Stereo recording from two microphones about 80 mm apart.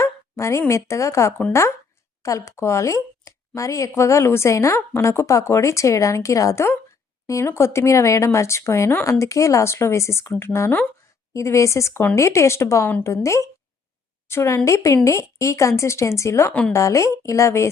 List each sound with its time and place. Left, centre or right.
0.0 s a sound: left
0.7 s speech: left
16.5 s a woman's voice: centre
16.7 s speech: left